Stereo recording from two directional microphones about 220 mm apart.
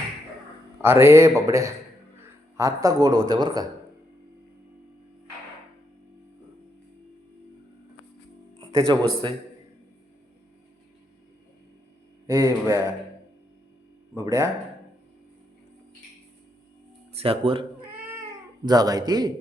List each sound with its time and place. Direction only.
0.8 s speech: 10° right (ahead or behind)
8.9 s speech: 20° right (ahead or behind)
12.3 s speech: 10° right (ahead or behind)
14.1 s speech: 15° right (ahead or behind)
17.2 s speech: 25° right (ahead or behind)
17.9 s cat: 10° right (ahead or behind)
18.6 s speech: 15° right (ahead or behind)